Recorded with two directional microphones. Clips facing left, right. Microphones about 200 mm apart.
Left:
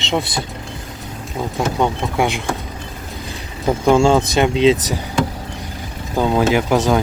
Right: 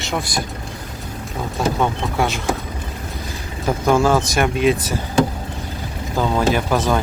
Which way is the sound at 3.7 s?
15° left (ahead or behind).